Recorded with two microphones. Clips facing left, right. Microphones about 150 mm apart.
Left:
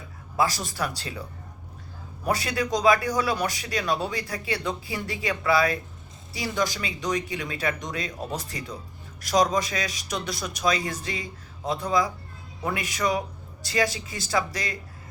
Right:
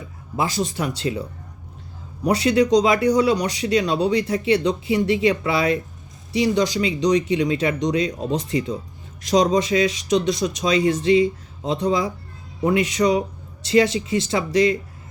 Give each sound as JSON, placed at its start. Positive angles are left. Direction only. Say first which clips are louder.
{"t": 0.3, "sound": "speech", "louder": "right 3 dB", "side_deg": -20}
{"t": 2.2, "sound": "speech", "louder": "right 9 dB", "side_deg": -20}